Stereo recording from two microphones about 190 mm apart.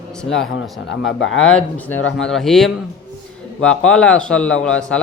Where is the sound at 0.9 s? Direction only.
85° left.